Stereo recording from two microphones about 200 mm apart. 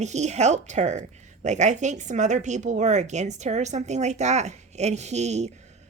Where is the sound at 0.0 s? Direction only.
35° right (ahead or behind).